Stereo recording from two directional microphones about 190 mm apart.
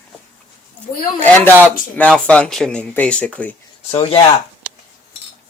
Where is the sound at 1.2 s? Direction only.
10° left (ahead or behind).